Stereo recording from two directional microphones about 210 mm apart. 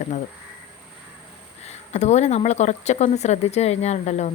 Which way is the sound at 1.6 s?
30° left (ahead or behind).